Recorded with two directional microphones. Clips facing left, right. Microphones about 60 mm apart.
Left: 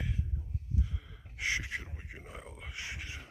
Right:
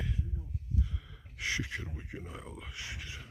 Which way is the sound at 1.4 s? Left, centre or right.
Left.